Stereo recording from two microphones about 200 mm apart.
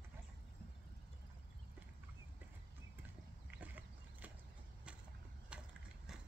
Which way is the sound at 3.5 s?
10° right (ahead or behind).